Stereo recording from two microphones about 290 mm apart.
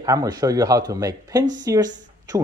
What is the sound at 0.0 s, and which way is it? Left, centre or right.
Speech, centre.